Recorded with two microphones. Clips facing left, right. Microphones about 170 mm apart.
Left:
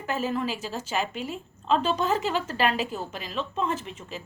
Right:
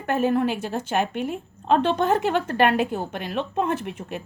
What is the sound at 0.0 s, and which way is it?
A woman's voice, 60° right (ahead or behind).